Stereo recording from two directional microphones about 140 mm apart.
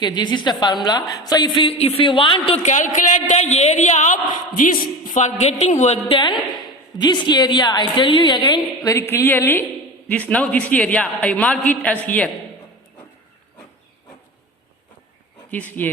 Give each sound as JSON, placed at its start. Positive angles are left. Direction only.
{"t": 0.0, "sound": "a woman's voice", "side_deg": 30}
{"t": 2.6, "sound": "a woman's voice", "side_deg": 60}
{"t": 4.5, "sound": "a woman's voice", "side_deg": 75}
{"t": 6.1, "sound": "a woman's voice", "side_deg": 35}
{"t": 15.4, "sound": "speech", "side_deg": 10}